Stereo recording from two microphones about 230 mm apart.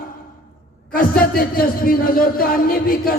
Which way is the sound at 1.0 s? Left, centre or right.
Left.